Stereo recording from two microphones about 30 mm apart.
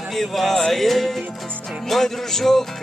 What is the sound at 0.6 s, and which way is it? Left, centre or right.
Music, centre.